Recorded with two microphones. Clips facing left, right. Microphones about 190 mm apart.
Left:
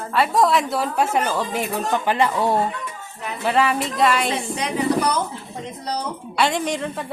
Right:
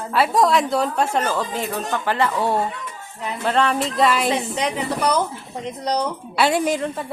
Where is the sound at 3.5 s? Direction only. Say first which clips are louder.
Even; 5° left (ahead or behind).